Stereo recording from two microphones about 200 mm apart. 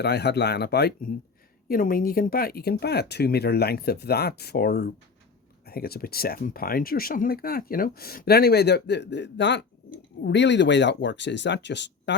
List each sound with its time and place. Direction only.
0.0 s speech: 55° left (ahead or behind)